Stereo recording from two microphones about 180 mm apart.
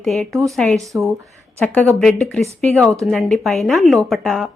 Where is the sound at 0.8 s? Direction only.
15° right (ahead or behind).